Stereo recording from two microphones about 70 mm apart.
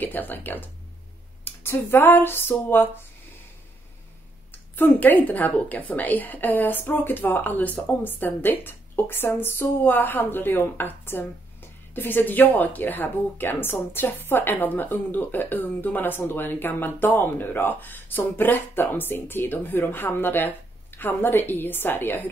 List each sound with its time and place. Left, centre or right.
0.0 s speech: left
1.4 s a sound: left
4.5 s speech: left